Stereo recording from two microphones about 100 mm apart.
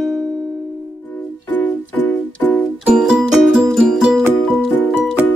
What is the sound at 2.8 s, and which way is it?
Music, 5° right (ahead or behind).